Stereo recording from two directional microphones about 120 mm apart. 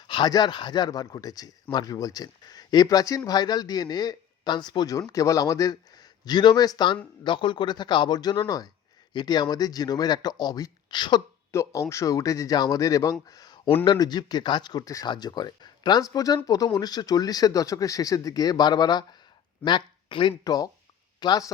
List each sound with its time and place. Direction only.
0.1 s speech: 35° left (ahead or behind)
11.5 s speech: 25° left (ahead or behind)